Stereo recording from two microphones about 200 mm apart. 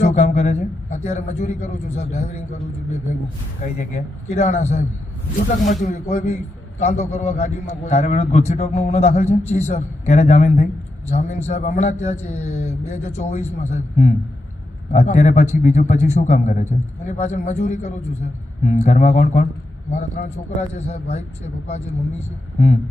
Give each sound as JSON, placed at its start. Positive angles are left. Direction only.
{"t": 0.0, "sound": "a man's voice", "side_deg": 35}
{"t": 3.6, "sound": "a man's voice", "side_deg": 40}